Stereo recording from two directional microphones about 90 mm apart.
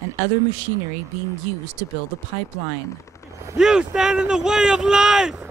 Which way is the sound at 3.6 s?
5° right (ahead or behind).